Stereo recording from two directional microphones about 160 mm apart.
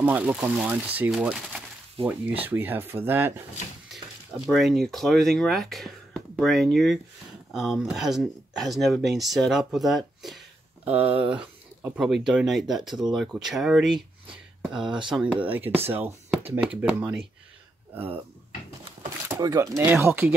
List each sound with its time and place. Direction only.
0.0 s speech: 10° right (ahead or behind)
3.9 s speech: centre (ahead or behind)
19.2 s speech: 20° right (ahead or behind)